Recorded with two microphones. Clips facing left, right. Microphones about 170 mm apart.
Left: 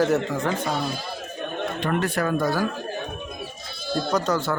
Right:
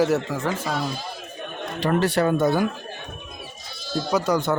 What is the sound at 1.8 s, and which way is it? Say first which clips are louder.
Speech: right 5 dB; 35° right (ahead or behind).